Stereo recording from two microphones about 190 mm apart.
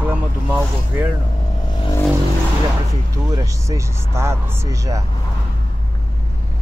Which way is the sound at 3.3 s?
15° right (ahead or behind).